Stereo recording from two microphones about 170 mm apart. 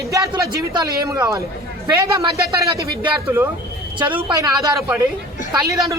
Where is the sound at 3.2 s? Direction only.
15° right (ahead or behind).